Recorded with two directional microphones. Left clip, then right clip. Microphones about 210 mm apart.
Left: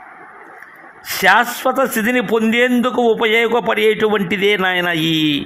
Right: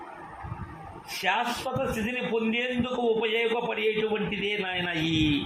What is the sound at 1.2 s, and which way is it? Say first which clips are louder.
A man's voice: left 14 dB; 50° left (ahead or behind).